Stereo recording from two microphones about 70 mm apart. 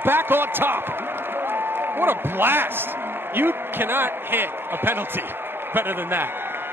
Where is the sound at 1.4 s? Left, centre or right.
Right.